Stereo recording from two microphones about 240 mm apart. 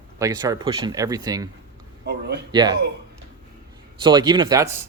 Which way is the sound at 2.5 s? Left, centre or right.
Centre.